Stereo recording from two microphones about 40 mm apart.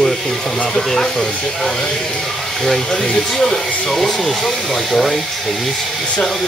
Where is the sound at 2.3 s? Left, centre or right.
Centre.